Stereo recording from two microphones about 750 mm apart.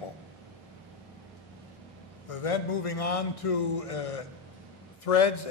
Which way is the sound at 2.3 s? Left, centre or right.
Left.